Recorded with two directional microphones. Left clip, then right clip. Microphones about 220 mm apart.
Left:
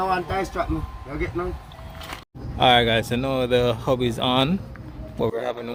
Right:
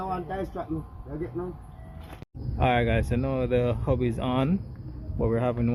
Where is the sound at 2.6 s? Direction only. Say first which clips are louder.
Left 8 dB; 5° left (ahead or behind).